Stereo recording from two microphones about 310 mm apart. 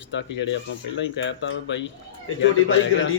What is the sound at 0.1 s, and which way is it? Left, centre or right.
A man's voice, left.